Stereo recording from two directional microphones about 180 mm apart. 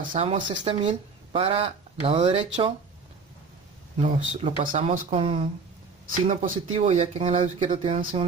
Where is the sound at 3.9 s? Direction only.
35° right (ahead or behind).